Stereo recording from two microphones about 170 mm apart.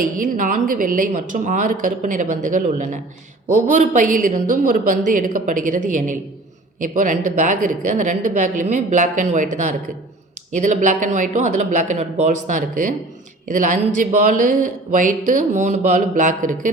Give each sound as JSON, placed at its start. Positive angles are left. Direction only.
{"t": 0.2, "sound": "speech", "side_deg": -50}